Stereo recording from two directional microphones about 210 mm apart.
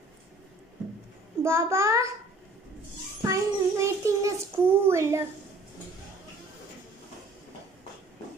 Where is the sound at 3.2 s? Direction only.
15° right (ahead or behind).